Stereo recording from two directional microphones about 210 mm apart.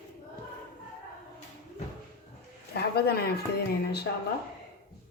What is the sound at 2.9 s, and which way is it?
Speech, 50° left (ahead or behind).